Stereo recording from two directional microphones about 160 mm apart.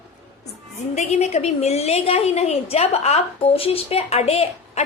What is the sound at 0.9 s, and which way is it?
A woman's voice, 45° left (ahead or behind).